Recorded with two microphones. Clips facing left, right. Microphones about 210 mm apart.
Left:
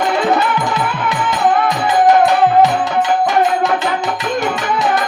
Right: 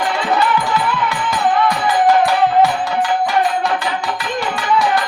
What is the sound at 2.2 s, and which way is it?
Music, 20° left (ahead or behind).